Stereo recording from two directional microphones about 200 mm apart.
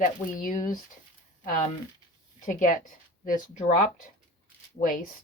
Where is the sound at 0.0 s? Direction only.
40° left (ahead or behind).